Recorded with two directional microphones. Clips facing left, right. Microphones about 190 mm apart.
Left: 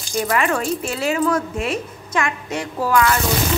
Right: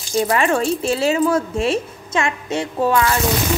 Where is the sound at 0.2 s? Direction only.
30° right (ahead or behind).